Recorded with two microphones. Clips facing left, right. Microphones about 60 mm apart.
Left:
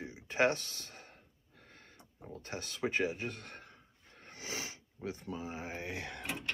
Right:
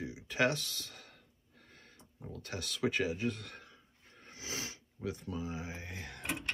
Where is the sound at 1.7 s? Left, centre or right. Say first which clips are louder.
Left 1 dB; left.